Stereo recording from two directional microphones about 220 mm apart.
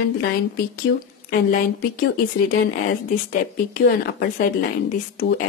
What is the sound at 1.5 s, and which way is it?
Speech, 45° left (ahead or behind).